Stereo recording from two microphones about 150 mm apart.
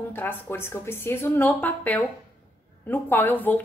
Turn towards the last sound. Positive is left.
turn(degrees=10)  # may be behind; listen again after turning